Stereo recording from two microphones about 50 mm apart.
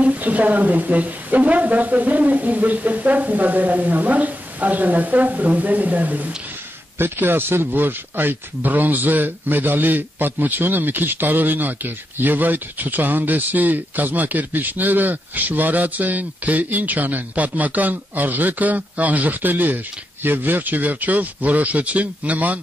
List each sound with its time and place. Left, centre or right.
0.0 s speech: right
7.0 s speech: right